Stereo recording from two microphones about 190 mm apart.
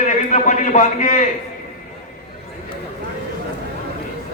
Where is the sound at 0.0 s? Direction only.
40° left (ahead or behind).